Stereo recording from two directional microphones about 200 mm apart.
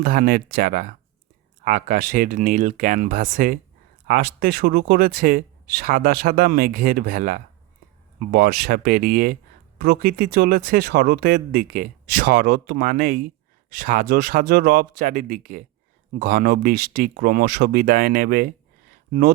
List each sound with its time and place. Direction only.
0.0 s speech: 45° right (ahead or behind)